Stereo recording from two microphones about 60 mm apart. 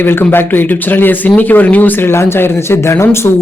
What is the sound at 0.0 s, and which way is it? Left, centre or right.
Speech, left.